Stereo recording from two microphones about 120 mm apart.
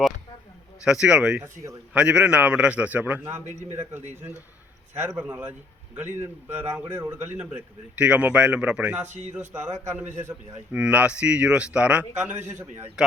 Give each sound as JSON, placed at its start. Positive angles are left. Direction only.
{"t": 0.9, "sound": "a man's voice", "side_deg": -5}
{"t": 5.0, "sound": "a man's voice", "side_deg": -10}
{"t": 9.0, "sound": "speech", "side_deg": -85}
{"t": 9.8, "sound": "a man's voice", "side_deg": -15}